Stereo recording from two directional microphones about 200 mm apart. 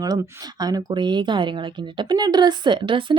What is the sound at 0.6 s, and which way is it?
A woman's voice, 20° right (ahead or behind).